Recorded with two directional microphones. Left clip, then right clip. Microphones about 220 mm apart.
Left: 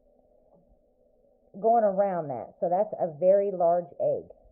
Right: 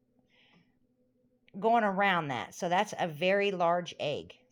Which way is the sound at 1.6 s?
15° right (ahead or behind).